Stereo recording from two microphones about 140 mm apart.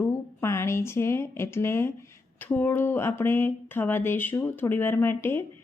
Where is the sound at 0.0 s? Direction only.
15° left (ahead or behind).